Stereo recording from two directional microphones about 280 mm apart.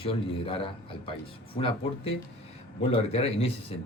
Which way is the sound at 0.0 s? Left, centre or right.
Centre.